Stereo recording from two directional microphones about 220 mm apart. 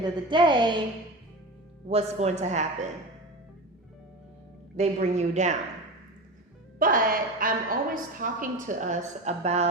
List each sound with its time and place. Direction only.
0.0 s a woman's voice: 20° right (ahead or behind)
1.9 s a woman's voice: 30° right (ahead or behind)
4.8 s a woman's voice: 30° right (ahead or behind)
6.7 s a woman's voice: 40° right (ahead or behind)